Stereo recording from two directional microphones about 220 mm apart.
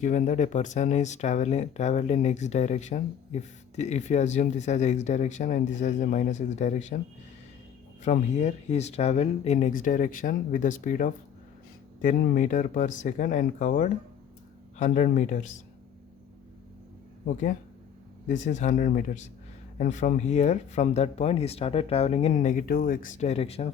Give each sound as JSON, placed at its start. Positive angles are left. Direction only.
{"t": 0.0, "sound": "speech", "side_deg": 35}
{"t": 8.0, "sound": "speech", "side_deg": 30}
{"t": 18.3, "sound": "speech", "side_deg": 35}